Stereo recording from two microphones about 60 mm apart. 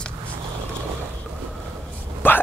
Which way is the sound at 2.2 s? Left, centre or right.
Left.